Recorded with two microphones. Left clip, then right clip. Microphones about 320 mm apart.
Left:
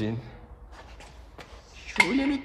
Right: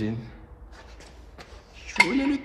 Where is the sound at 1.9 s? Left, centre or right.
Left.